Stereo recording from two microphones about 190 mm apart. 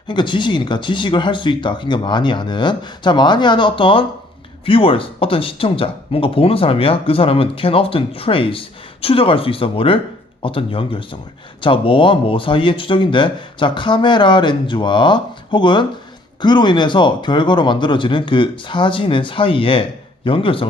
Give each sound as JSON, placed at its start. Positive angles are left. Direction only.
{"t": 0.1, "sound": "speech", "side_deg": 25}